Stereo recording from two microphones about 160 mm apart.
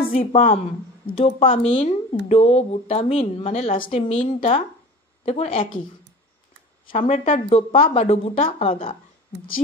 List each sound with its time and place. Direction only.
0.0 s a woman's voice: 35° left (ahead or behind)
7.0 s speech: 45° left (ahead or behind)